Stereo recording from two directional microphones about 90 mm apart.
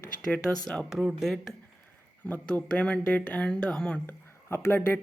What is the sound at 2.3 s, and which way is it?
Speech, 15° left (ahead or behind).